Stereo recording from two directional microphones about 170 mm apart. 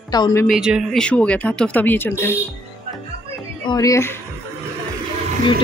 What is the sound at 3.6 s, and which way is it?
Speech, 20° left (ahead or behind).